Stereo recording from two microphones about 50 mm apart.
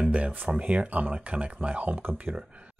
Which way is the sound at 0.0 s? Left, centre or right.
Right.